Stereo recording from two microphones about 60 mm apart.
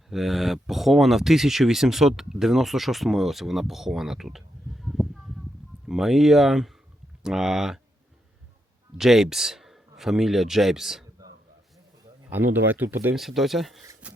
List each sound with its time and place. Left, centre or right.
0.1 s speech: centre
9.0 s speech: centre
12.3 s speech: right
13.1 s speech: centre
14.0 s a sound: right